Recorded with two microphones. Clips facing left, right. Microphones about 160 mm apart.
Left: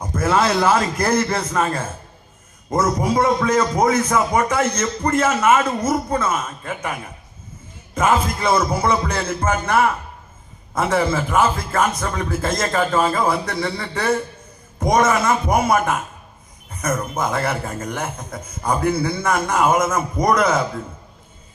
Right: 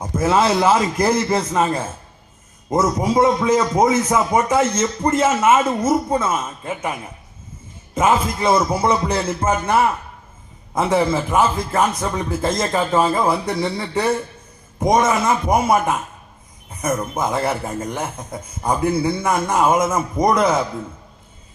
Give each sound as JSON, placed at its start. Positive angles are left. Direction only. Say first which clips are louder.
{"t": 0.0, "sound": "a man's voice", "louder": "right 1 dB", "side_deg": -20}
{"t": 7.9, "sound": "a man's voice", "louder": "right 1 dB", "side_deg": -20}
{"t": 10.8, "sound": "a man's voice", "louder": "right 1 dB", "side_deg": -20}
{"t": 16.8, "sound": "a man's voice", "louder": "right 1 dB", "side_deg": -15}